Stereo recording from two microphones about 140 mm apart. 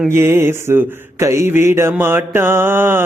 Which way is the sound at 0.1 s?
15° right (ahead or behind).